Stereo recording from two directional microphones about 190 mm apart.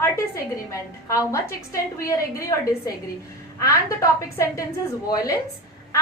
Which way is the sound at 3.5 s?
15° left (ahead or behind).